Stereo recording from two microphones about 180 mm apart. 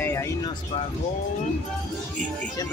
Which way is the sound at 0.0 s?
15° left (ahead or behind).